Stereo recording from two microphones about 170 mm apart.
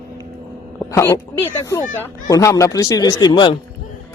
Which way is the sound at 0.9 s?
15° left (ahead or behind).